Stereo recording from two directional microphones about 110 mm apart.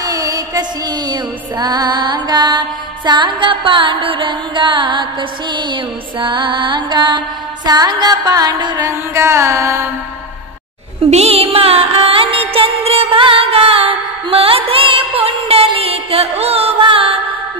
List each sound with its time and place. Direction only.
0.0 s music: 35° right (ahead or behind)
9.1 s carnatic music: 25° right (ahead or behind)
11.1 s music: 70° right (ahead or behind)